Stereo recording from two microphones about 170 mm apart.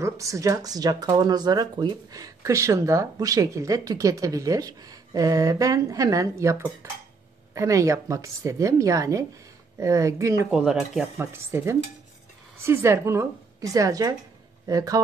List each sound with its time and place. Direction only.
0.0 s speech: 20° right (ahead or behind)
10.5 s a woman's voice: 5° right (ahead or behind); by 15.0 s 20° right (ahead or behind)